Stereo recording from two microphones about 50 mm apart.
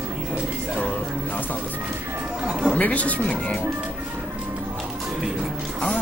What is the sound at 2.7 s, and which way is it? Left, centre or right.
Speech, left.